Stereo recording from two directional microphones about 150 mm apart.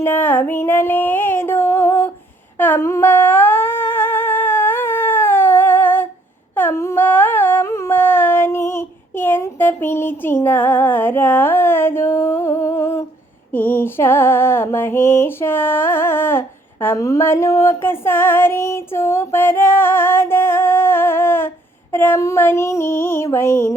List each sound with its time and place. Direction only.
0.0 s female singing: 15° left (ahead or behind)
2.6 s humming: 15° left (ahead or behind)
13.5 s music: 15° left (ahead or behind)